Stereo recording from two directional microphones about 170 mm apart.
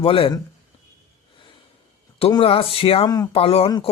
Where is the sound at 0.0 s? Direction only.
30° left (ahead or behind).